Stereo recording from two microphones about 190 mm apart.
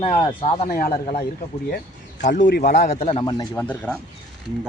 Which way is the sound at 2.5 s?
60° left (ahead or behind).